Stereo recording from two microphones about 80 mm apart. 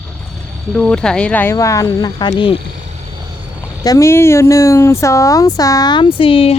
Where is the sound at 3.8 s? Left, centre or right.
Left.